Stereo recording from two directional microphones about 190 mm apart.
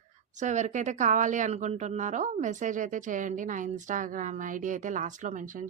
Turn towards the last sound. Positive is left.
turn(degrees=-45)  # may be behind; listen again after turning